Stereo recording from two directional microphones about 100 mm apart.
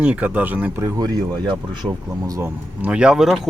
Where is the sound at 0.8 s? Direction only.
40° right (ahead or behind).